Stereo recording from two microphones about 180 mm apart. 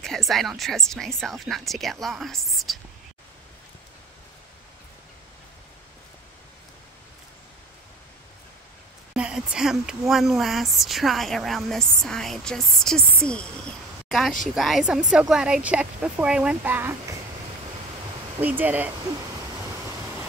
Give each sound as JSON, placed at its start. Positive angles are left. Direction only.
{"t": 0.0, "sound": "speech", "side_deg": 0}
{"t": 9.1, "sound": "speech", "side_deg": -5}
{"t": 18.4, "sound": "speech", "side_deg": -10}